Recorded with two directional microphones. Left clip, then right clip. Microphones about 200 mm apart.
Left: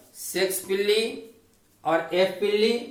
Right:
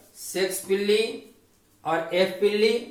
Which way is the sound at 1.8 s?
25° left (ahead or behind).